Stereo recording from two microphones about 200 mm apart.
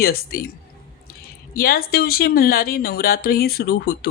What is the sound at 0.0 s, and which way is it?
Speech, 50° left (ahead or behind).